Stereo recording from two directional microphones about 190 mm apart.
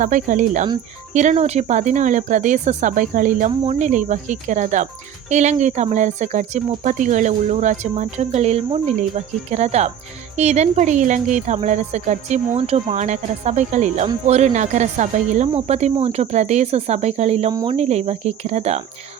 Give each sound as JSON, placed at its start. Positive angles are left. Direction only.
{"t": 0.0, "sound": "speech", "side_deg": -45}
{"t": 17.5, "sound": "speech", "side_deg": -20}
{"t": 17.7, "sound": "speech", "side_deg": -35}